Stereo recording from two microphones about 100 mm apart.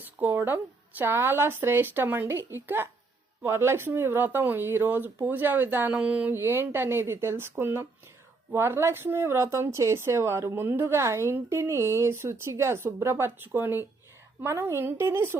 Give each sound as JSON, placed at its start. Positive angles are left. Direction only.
{"t": 0.0, "sound": "speech", "side_deg": -20}